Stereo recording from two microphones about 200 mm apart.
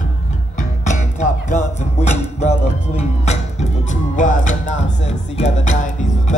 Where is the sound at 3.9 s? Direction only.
40° left (ahead or behind).